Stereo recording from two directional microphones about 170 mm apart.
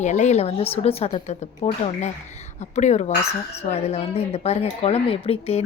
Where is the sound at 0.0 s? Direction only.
45° left (ahead or behind).